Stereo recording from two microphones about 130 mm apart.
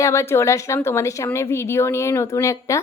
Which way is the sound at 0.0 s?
20° left (ahead or behind).